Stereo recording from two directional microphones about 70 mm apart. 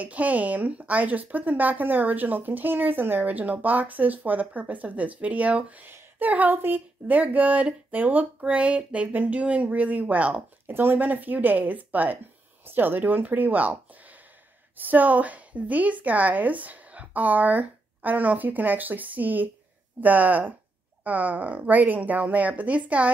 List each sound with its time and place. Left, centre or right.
0.0 s speech: right
14.8 s speech: right